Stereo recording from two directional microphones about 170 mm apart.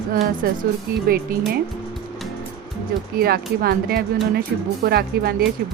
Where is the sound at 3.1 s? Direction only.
65° right (ahead or behind).